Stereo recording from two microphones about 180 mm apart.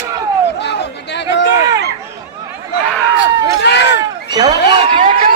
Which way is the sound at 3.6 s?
70° left (ahead or behind).